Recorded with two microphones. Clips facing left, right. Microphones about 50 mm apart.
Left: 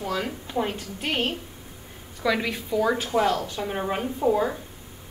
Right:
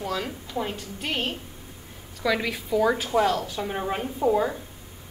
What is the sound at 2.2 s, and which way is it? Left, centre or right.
A woman's voice, centre.